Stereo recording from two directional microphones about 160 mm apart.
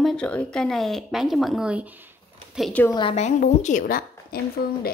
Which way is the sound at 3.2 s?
50° left (ahead or behind).